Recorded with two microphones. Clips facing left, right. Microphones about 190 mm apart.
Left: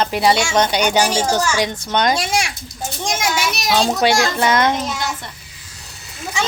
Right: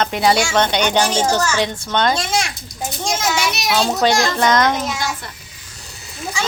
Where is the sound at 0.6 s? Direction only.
10° left (ahead or behind).